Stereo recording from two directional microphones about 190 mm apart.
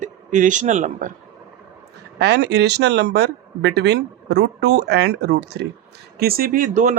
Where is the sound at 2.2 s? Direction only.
60° right (ahead or behind).